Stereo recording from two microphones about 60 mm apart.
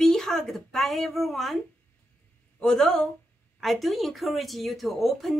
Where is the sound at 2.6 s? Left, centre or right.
Centre.